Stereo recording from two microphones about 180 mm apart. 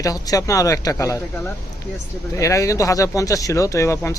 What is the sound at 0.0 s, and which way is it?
Speech, 20° left (ahead or behind).